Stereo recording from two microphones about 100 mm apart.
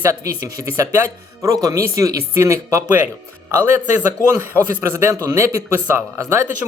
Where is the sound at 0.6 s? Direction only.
30° right (ahead or behind).